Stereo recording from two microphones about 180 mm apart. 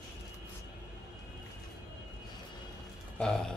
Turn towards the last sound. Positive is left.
turn(degrees=5)  # may be behind; listen again after turning